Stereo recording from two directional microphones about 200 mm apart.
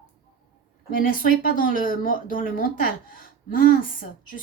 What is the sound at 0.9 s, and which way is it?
A woman's voice, 45° left (ahead or behind).